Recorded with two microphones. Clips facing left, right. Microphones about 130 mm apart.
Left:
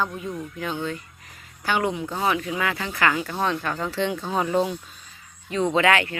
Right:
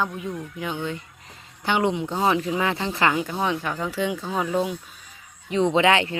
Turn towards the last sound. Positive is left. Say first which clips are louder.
# right 1 dB
turn(degrees=-25)  # may be behind; listen again after turning